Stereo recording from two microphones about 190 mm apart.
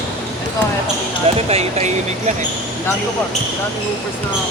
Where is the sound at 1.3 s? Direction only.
35° right (ahead or behind).